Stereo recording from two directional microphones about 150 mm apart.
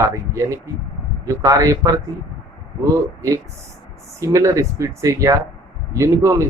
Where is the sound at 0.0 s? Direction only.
20° right (ahead or behind).